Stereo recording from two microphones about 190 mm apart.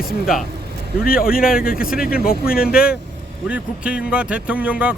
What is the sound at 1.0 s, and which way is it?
Speech, 50° left (ahead or behind).